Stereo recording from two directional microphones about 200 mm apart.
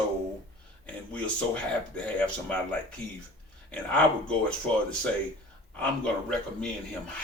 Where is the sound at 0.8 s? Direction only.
5° left (ahead or behind).